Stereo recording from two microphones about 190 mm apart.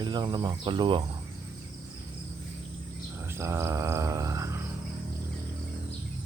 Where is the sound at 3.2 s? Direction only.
15° right (ahead or behind).